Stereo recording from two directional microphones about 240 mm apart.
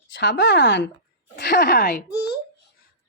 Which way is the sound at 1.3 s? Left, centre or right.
Left.